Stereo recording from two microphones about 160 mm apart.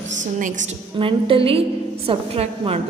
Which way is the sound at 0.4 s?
50° right (ahead or behind).